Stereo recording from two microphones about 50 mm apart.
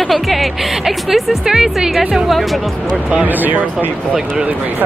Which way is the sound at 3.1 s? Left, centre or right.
Right.